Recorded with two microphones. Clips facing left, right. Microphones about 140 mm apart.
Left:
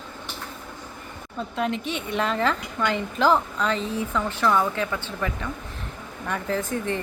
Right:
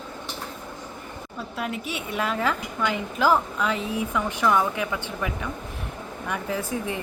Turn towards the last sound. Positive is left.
turn(degrees=-10)  # may be behind; listen again after turning